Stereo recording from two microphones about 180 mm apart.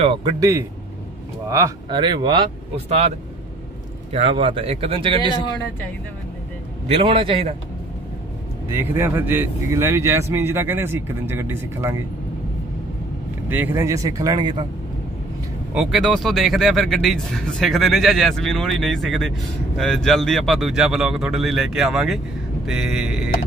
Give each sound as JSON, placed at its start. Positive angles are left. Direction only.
{"t": 0.0, "sound": "speech", "side_deg": -30}
{"t": 1.9, "sound": "speech", "side_deg": -25}
{"t": 4.1, "sound": "speech", "side_deg": -35}
{"t": 6.9, "sound": "speech", "side_deg": -30}
{"t": 8.7, "sound": "speech", "side_deg": -15}
{"t": 13.5, "sound": "speech", "side_deg": -10}
{"t": 15.7, "sound": "speech", "side_deg": 0}